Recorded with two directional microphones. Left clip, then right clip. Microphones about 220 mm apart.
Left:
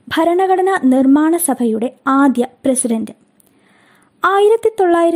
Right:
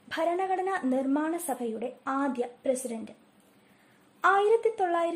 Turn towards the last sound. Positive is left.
turn(degrees=45)  # may be behind; listen again after turning